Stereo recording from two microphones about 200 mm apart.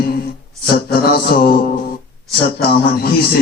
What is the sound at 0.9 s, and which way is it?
Speech, 50° left (ahead or behind).